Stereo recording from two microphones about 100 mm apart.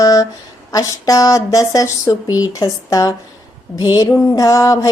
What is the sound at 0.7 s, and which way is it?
A woman's voice, 35° left (ahead or behind).